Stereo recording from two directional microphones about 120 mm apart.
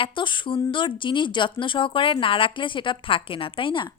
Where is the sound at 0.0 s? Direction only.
45° left (ahead or behind).